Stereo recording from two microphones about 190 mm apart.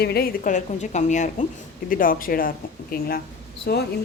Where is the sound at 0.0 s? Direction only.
55° left (ahead or behind).